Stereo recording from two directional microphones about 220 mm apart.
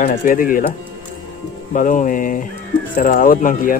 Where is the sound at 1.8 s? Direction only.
35° left (ahead or behind).